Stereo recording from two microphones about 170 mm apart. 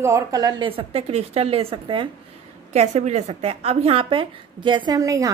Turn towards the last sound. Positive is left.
turn(degrees=-20)  # may be behind; listen again after turning